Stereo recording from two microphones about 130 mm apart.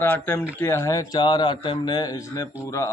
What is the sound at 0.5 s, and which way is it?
A man's voice, 20° left (ahead or behind).